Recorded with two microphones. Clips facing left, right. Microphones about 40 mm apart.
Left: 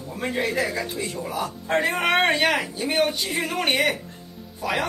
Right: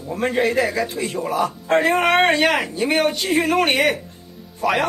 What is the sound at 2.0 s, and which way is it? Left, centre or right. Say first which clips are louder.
Speech: right 4 dB; centre.